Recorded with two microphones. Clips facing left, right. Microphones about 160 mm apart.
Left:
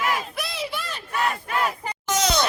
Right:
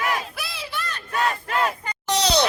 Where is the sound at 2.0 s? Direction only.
35° right (ahead or behind).